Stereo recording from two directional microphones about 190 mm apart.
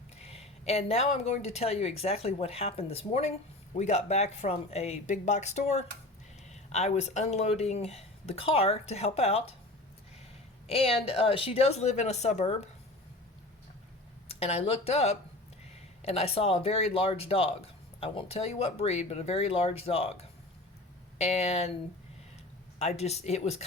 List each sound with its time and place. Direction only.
0.3 s speech: 30° left (ahead or behind)
10.7 s speech: 30° left (ahead or behind)
14.3 s speech: 30° left (ahead or behind)
21.2 s speech: 35° left (ahead or behind)
22.8 s speech: 35° left (ahead or behind)